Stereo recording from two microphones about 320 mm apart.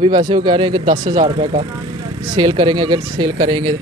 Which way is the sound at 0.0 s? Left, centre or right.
Centre.